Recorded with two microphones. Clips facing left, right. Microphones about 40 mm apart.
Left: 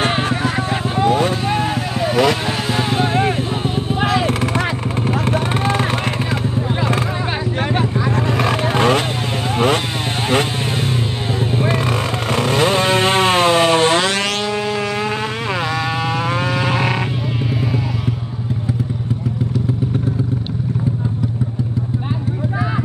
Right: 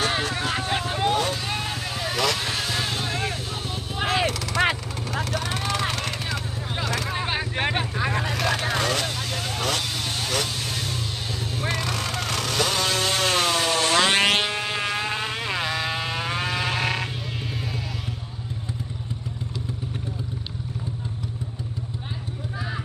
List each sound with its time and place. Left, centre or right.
0.0 s vehicle: left
4.0 s a sound: left
5.1 s vehicle: left
8.3 s vehicle: left
11.5 s vehicle: left
14.1 s vehicle: right
16.3 s a sound: centre